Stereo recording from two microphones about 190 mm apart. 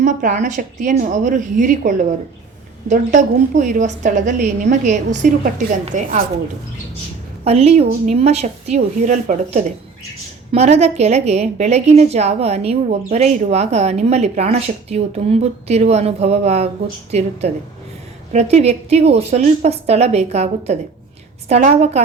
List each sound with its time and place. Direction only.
0.0 s a woman's voice: 40° right (ahead or behind)
7.4 s a woman's voice: 35° right (ahead or behind)